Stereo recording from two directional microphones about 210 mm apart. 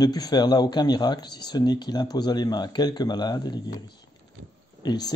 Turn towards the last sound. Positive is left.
turn(degrees=20)  # may be behind; listen again after turning